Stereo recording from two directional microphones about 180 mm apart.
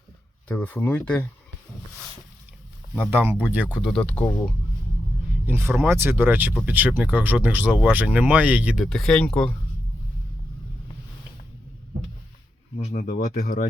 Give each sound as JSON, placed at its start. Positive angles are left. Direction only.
{"t": 0.4, "sound": "speech", "side_deg": 10}
{"t": 3.0, "sound": "speech", "side_deg": -10}
{"t": 5.5, "sound": "speech", "side_deg": -15}
{"t": 12.8, "sound": "speech", "side_deg": 50}